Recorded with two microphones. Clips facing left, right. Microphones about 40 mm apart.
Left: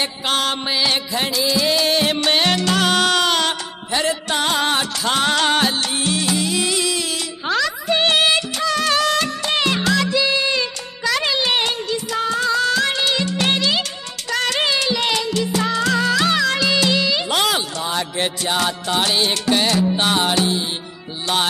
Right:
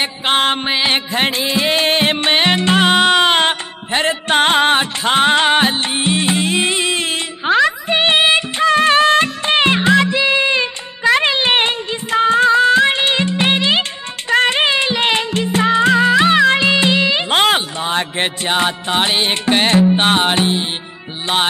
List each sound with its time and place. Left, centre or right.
0.0 s music: right